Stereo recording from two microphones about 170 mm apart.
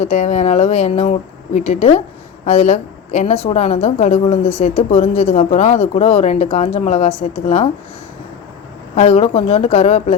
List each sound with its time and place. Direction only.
0.0 s a woman's voice: 45° left (ahead or behind)
9.0 s a woman's voice: 40° left (ahead or behind)